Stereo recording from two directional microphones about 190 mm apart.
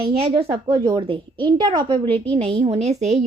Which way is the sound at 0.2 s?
30° right (ahead or behind).